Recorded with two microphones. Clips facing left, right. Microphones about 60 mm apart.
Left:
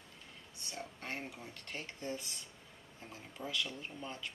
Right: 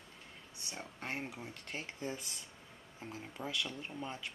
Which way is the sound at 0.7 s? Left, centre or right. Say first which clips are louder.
Right 1 dB; centre.